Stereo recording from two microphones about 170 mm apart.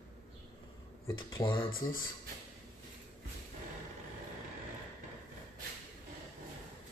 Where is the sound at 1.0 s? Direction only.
25° left (ahead or behind).